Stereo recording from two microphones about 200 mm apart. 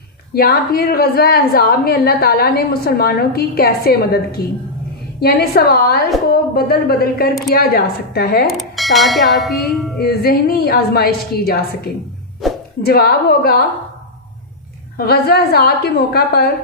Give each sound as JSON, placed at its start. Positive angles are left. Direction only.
{"t": 0.3, "sound": "a woman's voice", "side_deg": 50}
{"t": 8.4, "sound": "speech", "side_deg": 0}
{"t": 10.0, "sound": "a woman's voice", "side_deg": 50}
{"t": 12.4, "sound": "music", "side_deg": 0}
{"t": 12.8, "sound": "a woman's voice", "side_deg": 50}
{"t": 14.9, "sound": "a woman's voice", "side_deg": 50}